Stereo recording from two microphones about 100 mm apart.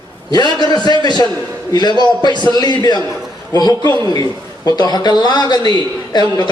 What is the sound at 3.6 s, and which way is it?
A man's voice, 45° left (ahead or behind).